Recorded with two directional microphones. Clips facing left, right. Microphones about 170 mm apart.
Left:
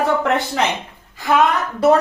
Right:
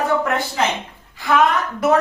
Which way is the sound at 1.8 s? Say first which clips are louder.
Left 3 dB; 30° left (ahead or behind).